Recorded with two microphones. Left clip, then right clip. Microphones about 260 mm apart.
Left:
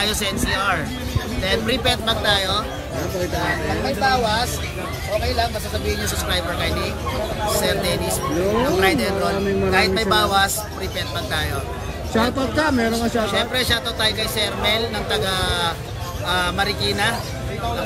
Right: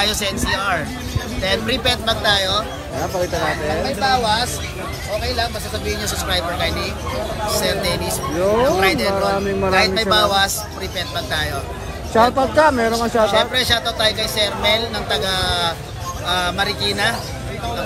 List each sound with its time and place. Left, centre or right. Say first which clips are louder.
0.0 s speech: right 2 dB; centre
4.0 s speech: right 2 dB; right
6.2 s speech: right 3 dB; centre